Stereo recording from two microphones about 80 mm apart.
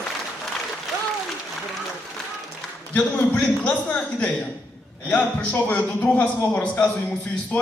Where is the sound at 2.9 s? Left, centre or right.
Centre.